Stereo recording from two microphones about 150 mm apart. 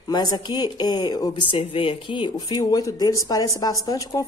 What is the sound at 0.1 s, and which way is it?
Speech, 30° left (ahead or behind).